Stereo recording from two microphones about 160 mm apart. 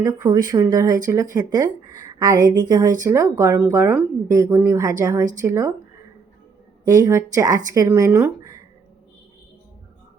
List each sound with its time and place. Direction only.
0.0 s speech: 25° right (ahead or behind)
6.8 s speech: 20° right (ahead or behind)